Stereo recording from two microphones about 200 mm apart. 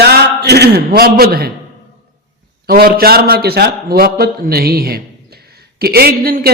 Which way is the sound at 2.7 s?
45° right (ahead or behind).